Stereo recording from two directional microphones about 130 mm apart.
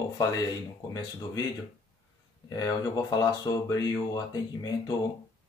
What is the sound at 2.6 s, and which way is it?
Speech, 30° left (ahead or behind).